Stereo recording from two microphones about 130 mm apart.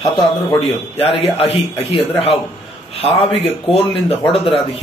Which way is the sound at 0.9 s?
50° left (ahead or behind).